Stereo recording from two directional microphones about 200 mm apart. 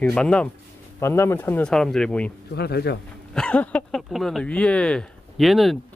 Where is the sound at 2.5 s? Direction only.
55° left (ahead or behind).